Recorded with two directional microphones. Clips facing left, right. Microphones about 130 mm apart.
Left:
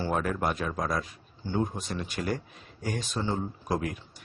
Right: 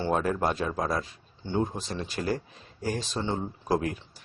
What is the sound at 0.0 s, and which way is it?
Speech, 30° right (ahead or behind).